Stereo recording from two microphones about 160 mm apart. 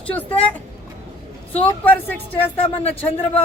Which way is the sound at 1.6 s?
10° left (ahead or behind).